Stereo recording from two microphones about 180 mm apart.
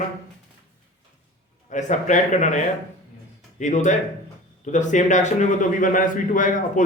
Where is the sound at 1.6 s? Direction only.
45° left (ahead or behind).